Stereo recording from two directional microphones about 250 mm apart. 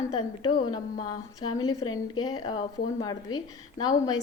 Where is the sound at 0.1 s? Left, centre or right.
Centre.